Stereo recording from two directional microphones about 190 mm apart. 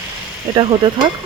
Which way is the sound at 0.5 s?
25° right (ahead or behind).